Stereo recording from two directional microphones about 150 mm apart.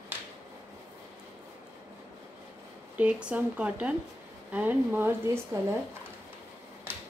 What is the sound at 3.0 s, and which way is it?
Speech, 10° right (ahead or behind).